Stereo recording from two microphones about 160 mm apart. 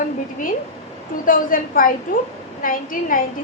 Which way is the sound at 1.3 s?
60° left (ahead or behind).